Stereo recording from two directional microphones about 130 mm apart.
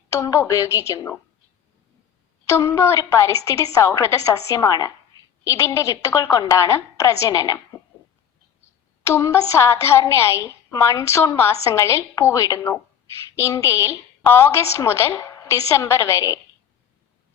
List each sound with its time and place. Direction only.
0.1 s a woman's voice: 25° left (ahead or behind)
2.5 s a woman's voice: 20° left (ahead or behind)
9.0 s a woman's voice: 20° left (ahead or behind)